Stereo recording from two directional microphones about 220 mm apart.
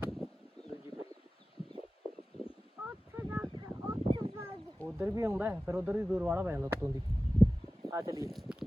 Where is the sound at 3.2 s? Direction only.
10° right (ahead or behind).